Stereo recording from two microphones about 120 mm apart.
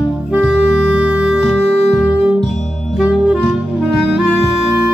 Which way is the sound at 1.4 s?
Centre (ahead or behind).